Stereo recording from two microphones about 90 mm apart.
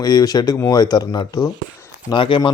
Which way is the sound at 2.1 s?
70° left (ahead or behind).